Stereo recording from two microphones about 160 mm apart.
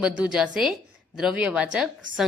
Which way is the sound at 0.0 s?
5° right (ahead or behind).